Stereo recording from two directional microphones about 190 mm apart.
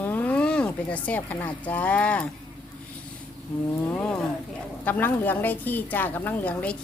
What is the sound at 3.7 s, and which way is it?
A woman's voice, 5° left (ahead or behind).